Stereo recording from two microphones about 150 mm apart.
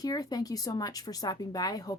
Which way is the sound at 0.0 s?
25° left (ahead or behind).